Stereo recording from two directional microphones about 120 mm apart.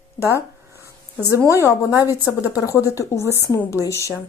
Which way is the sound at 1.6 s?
25° left (ahead or behind).